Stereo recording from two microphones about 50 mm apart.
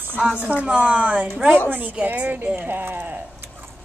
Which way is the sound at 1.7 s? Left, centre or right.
Right.